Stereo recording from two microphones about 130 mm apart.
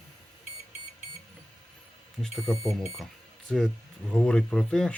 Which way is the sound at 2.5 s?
5° left (ahead or behind).